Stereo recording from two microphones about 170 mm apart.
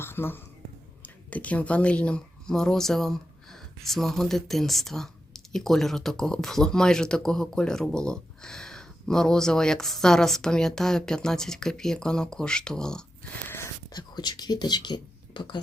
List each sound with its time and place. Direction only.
0.0 s speech: 15° left (ahead or behind)
13.5 s speech: 20° left (ahead or behind)